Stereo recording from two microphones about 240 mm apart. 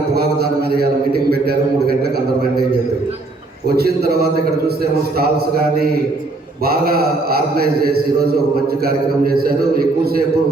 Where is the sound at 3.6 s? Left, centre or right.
Right.